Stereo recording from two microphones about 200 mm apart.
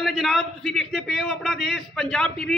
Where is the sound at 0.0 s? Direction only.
Centre (ahead or behind).